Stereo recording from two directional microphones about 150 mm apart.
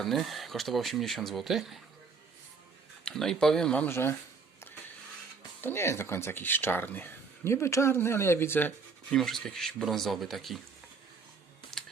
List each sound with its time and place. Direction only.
0.0 s speech: centre (ahead or behind)
3.0 s speech: 5° left (ahead or behind)
5.6 s speech: 15° left (ahead or behind)
9.1 s speech: centre (ahead or behind)